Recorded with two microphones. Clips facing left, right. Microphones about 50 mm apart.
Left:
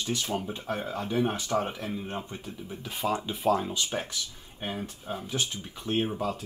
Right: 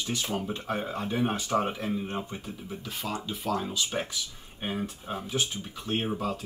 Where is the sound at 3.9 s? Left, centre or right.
Centre.